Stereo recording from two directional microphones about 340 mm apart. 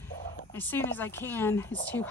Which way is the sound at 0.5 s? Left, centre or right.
Centre.